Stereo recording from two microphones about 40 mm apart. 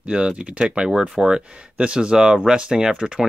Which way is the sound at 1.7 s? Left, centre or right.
Right.